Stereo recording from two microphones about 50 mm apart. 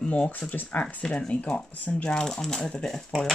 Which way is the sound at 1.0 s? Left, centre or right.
Centre.